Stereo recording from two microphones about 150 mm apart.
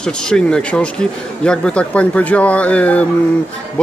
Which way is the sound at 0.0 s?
5° left (ahead or behind).